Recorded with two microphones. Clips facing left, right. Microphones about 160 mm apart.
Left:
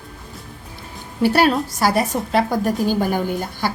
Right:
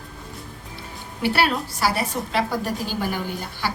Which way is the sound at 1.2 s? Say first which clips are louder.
Left 6 dB; 45° left (ahead or behind).